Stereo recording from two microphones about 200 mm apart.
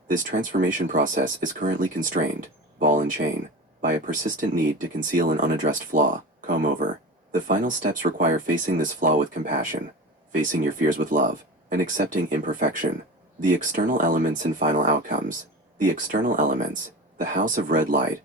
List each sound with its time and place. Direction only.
0.1 s speech: 40° right (ahead or behind)